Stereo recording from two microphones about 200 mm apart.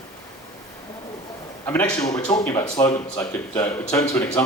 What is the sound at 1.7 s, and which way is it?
A man's voice, 5° left (ahead or behind).